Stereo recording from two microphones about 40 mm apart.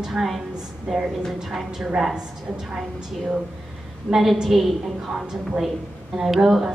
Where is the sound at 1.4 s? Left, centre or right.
Centre.